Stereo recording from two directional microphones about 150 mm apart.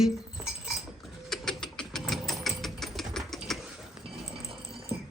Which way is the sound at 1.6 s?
5° left (ahead or behind).